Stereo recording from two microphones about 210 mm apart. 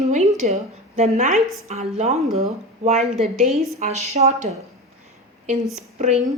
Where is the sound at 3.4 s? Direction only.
Centre (ahead or behind).